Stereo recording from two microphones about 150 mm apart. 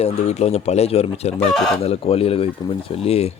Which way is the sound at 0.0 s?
45° left (ahead or behind).